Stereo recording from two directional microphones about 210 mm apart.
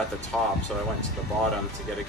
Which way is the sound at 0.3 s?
Centre (ahead or behind).